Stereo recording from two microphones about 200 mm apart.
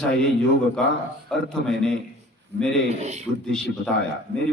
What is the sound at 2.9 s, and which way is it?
Speech, 35° right (ahead or behind).